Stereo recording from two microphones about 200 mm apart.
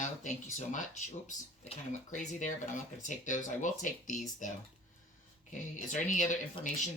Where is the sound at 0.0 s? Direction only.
35° left (ahead or behind).